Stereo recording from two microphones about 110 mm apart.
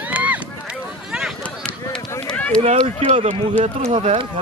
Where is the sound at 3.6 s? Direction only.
55° right (ahead or behind).